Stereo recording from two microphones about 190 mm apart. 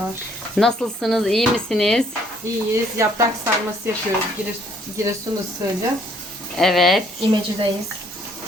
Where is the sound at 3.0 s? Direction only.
15° right (ahead or behind).